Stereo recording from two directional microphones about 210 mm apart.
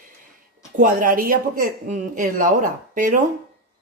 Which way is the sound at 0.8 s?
40° right (ahead or behind).